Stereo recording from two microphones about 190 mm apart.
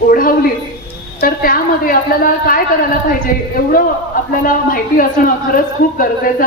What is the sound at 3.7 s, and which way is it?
A woman's voice, 45° left (ahead or behind).